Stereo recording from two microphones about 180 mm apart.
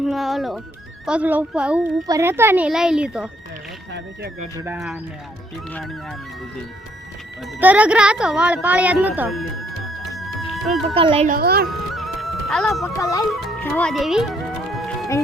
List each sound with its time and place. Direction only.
0.0 s a woman's voice: centre (ahead or behind)
4.5 s a woman's voice: 15° right (ahead or behind)
5.7 s speech: centre (ahead or behind)
7.6 s a woman's voice: 10° right (ahead or behind)
10.5 s speech: centre (ahead or behind)
10.9 s speech: 30° right (ahead or behind)
11.3 s speech: 55° right (ahead or behind)
11.7 s music: centre (ahead or behind)
13.0 s speech: 20° left (ahead or behind)
13.6 s music: 5° left (ahead or behind)